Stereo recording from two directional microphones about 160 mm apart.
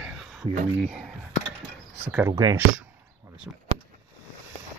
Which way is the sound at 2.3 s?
20° right (ahead or behind).